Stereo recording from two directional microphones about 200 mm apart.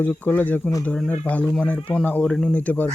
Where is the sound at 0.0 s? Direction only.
10° left (ahead or behind).